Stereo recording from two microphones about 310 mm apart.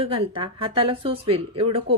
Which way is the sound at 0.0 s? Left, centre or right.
Centre.